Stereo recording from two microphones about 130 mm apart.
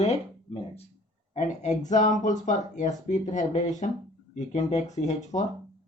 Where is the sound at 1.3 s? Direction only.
65° left (ahead or behind).